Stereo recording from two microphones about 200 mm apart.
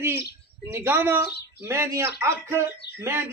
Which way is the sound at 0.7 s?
10° right (ahead or behind).